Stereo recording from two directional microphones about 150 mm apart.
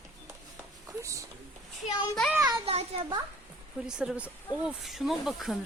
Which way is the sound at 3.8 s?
5° right (ahead or behind).